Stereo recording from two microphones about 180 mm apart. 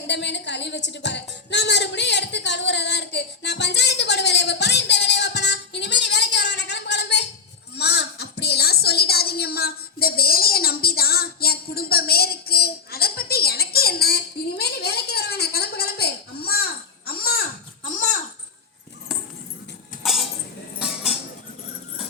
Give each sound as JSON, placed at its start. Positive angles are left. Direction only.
{"t": 0.1, "sound": "music", "side_deg": 75}
{"t": 7.8, "sound": "a sound", "side_deg": 65}
{"t": 20.0, "sound": "music", "side_deg": 0}
{"t": 20.7, "sound": "cutlery", "side_deg": -5}